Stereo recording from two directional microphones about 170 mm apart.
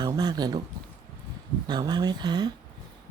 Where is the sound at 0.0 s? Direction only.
25° right (ahead or behind).